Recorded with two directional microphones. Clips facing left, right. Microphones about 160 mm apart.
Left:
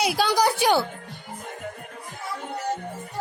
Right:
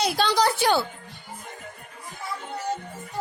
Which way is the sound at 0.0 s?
10° left (ahead or behind).